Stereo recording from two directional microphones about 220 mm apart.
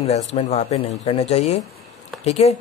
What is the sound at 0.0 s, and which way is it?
A man's voice, 30° left (ahead or behind).